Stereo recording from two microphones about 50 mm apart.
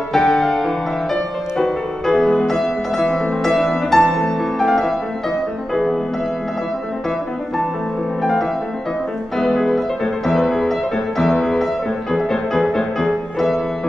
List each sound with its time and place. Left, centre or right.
0.1 s music: centre
8.2 s music: centre